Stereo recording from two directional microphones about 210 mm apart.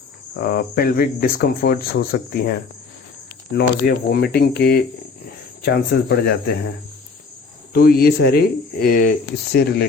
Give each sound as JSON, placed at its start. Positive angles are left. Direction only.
{"t": 0.3, "sound": "speech", "side_deg": 45}
{"t": 3.6, "sound": "speech", "side_deg": 50}
{"t": 7.7, "sound": "speech", "side_deg": 45}